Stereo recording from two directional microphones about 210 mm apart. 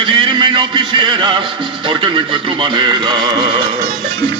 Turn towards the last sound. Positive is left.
turn(degrees=-20)  # may be behind; listen again after turning